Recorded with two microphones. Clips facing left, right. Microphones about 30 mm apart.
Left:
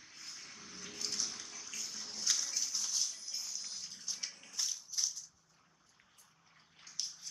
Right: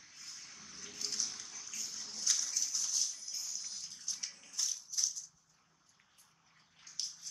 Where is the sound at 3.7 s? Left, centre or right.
Centre.